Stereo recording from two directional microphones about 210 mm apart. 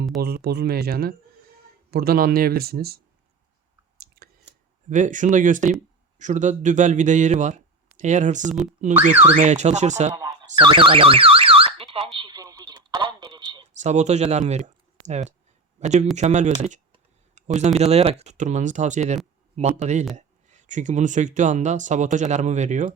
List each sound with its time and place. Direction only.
0.2 s speech: 50° right (ahead or behind)
4.0 s chewing: 45° right (ahead or behind)
4.4 s speech: 35° right (ahead or behind)
10.2 s car alarm: 15° right (ahead or behind)
12.1 s radio: 20° right (ahead or behind)
13.7 s speech: 35° right (ahead or behind)